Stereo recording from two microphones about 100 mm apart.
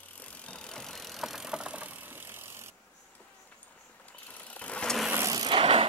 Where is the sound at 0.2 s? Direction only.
15° left (ahead or behind); by 2.7 s 25° right (ahead or behind).